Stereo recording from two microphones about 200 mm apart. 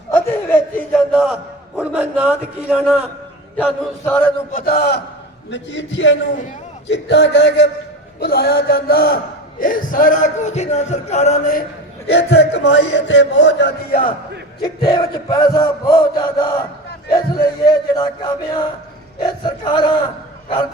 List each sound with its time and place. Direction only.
0.1 s chuckle: 10° left (ahead or behind)
1.1 s a man's voice: centre (ahead or behind)
3.6 s a sound: centre (ahead or behind)
4.5 s speech: 50° left (ahead or behind)
5.5 s a man's voice: 65° left (ahead or behind); by 11.6 s 35° left (ahead or behind)
12.0 s a man's voice: 55° left (ahead or behind)
14.6 s chant: 20° left (ahead or behind)
19.2 s chant: 20° left (ahead or behind)